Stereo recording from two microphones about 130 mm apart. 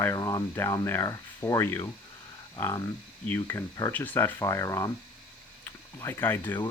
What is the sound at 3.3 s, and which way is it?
Speech, 15° left (ahead or behind).